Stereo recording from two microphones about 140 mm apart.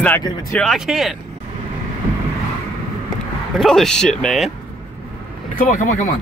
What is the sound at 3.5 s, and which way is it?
Speech, centre (ahead or behind).